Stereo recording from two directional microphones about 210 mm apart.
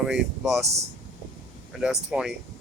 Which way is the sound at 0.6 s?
30° right (ahead or behind).